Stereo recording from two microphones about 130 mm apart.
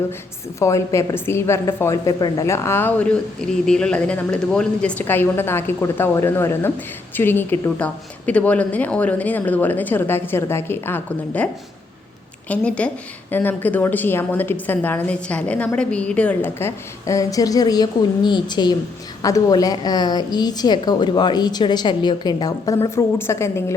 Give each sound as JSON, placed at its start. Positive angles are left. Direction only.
{"t": 0.6, "sound": "a woman's voice", "side_deg": 25}
{"t": 12.5, "sound": "a woman's voice", "side_deg": 10}